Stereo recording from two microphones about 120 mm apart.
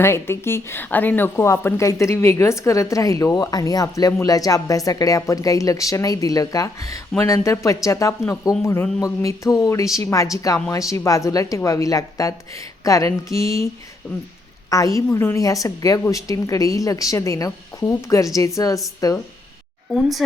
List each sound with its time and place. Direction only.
0.0 s speech: 20° left (ahead or behind)
14.7 s speech: 25° left (ahead or behind)
19.9 s speech: centre (ahead or behind)